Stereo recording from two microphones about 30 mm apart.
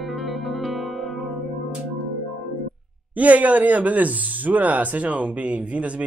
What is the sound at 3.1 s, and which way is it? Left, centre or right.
Speech, right.